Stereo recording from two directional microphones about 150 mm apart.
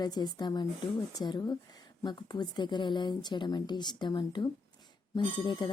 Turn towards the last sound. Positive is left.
turn(degrees=30)  # may be behind; listen again after turning